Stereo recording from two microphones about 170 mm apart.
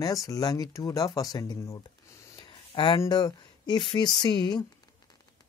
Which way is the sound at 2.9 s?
25° left (ahead or behind).